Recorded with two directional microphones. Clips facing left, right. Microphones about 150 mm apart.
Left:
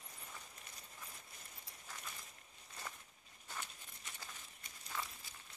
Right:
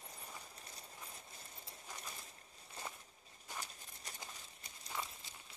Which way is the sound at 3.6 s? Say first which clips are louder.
Right 2 dB; 40° right (ahead or behind).